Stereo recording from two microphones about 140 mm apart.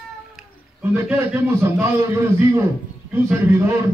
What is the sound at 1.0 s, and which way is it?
Speech, 15° right (ahead or behind).